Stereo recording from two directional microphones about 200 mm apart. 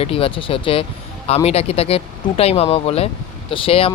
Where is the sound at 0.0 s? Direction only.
30° left (ahead or behind).